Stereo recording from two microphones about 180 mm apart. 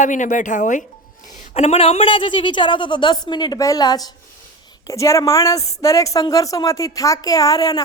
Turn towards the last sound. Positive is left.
turn(degrees=20)  # may be behind; listen again after turning